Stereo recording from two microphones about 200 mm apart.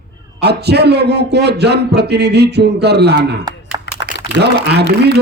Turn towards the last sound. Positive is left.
turn(degrees=-55)  # may be behind; listen again after turning